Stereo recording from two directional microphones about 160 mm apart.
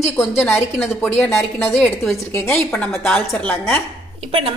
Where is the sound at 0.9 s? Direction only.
10° left (ahead or behind).